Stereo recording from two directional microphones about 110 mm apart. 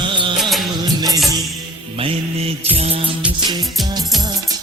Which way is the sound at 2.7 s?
65° right (ahead or behind).